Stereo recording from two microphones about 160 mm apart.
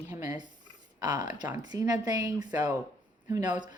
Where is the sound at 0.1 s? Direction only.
10° right (ahead or behind).